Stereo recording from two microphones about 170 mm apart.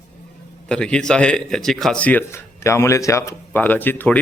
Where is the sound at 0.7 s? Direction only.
5° left (ahead or behind).